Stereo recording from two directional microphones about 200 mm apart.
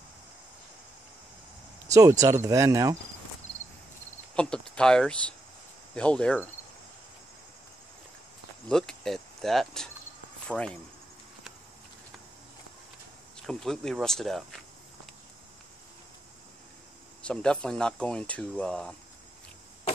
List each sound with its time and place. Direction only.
2.0 s speech: 15° right (ahead or behind)
4.4 s speech: 5° left (ahead or behind)
8.6 s speech: centre (ahead or behind)
13.5 s speech: centre (ahead or behind)
17.2 s speech: 5° left (ahead or behind)